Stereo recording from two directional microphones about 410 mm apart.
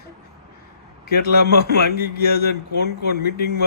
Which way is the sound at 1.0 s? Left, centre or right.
Left.